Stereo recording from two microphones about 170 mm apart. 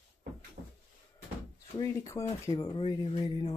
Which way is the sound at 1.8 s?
20° left (ahead or behind).